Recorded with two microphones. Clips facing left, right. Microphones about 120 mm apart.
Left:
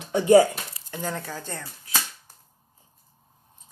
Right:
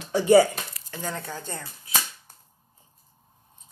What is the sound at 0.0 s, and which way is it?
Speech, 20° left (ahead or behind).